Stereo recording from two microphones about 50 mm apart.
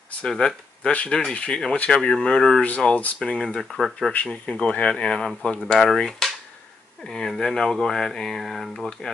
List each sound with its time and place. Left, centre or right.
0.2 s speech: centre
3.2 s speech: centre
4.3 s speech: centre
5.8 s a sound: centre
7.1 s speech: centre